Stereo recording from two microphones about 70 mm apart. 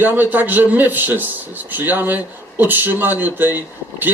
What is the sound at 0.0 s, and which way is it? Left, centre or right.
Speech, right.